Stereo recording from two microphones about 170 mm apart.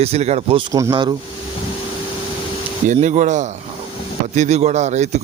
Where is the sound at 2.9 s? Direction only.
45° right (ahead or behind).